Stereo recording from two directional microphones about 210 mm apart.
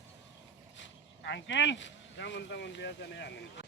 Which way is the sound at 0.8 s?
60° left (ahead or behind).